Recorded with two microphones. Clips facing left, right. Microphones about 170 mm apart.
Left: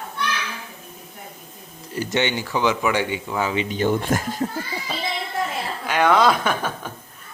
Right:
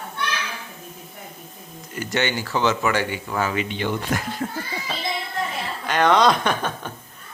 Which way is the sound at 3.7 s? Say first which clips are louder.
Left 4 dB; 45° left (ahead or behind).